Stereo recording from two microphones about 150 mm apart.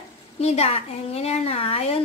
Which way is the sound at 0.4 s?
45° left (ahead or behind).